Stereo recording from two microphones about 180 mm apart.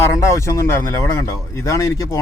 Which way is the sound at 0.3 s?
15° left (ahead or behind).